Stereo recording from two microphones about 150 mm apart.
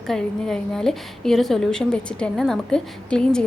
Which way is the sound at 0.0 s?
5° left (ahead or behind).